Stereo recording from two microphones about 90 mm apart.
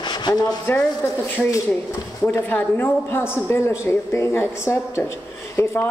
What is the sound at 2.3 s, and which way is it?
A woman's voice, 25° left (ahead or behind).